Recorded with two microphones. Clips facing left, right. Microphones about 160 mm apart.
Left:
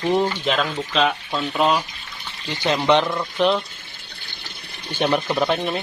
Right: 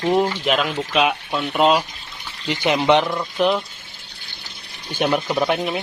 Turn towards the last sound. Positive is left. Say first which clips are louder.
# right 1 dB
turn(degrees=0)  # may be behind; listen again after turning